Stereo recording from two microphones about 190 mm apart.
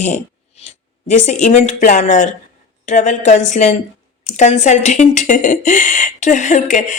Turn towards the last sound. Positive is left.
turn(degrees=40)  # may be behind; listen again after turning